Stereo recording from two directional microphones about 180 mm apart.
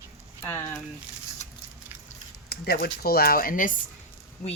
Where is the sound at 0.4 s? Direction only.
10° left (ahead or behind).